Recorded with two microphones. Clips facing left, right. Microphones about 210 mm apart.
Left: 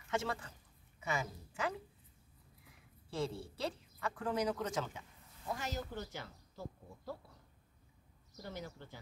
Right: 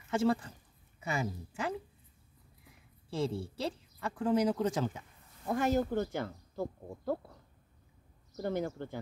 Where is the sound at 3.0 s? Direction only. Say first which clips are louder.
Right 5 dB; 30° right (ahead or behind).